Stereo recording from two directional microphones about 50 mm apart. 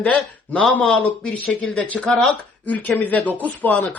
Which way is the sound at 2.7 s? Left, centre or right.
Left.